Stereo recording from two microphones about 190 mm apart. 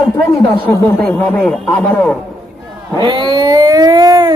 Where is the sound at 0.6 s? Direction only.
10° left (ahead or behind).